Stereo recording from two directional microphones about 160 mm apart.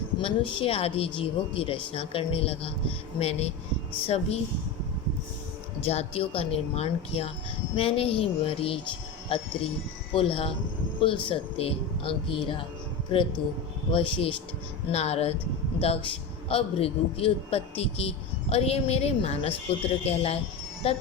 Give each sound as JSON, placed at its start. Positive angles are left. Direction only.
{"t": 0.2, "sound": "a man's voice", "side_deg": 35}
{"t": 5.8, "sound": "a man's voice", "side_deg": 40}
{"t": 13.9, "sound": "a man's voice", "side_deg": 35}